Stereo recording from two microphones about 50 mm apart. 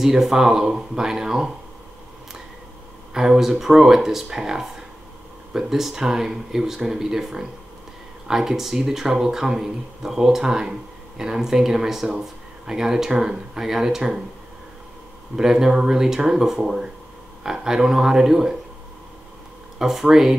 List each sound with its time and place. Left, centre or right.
0.0 s speech: centre
3.1 s speech: centre
15.3 s speech: centre
19.8 s speech: centre